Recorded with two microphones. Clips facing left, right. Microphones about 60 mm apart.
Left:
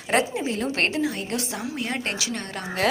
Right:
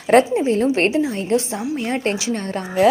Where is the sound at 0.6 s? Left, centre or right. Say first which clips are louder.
Right 7 dB; right.